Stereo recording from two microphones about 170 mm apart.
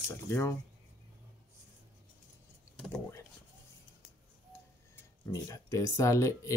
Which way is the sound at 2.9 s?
15° left (ahead or behind).